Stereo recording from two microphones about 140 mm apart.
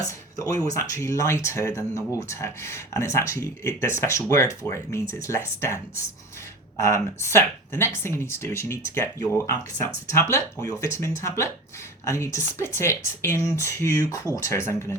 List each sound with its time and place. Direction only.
0.1 s speech: 25° left (ahead or behind)
6.8 s speech: 20° left (ahead or behind)